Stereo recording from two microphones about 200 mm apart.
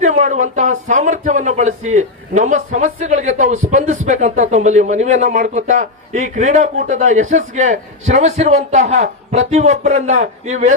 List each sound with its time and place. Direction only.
0.0 s speech: 35° right (ahead or behind)